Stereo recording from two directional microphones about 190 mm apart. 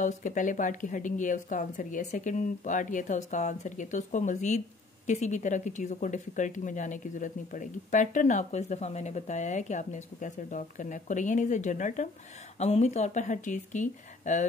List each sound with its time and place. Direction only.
0.0 s speech: 40° left (ahead or behind)